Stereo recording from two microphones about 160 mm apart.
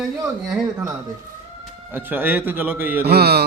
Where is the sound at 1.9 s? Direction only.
15° right (ahead or behind).